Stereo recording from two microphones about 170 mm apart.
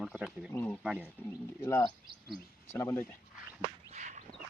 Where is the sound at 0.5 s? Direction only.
10° left (ahead or behind).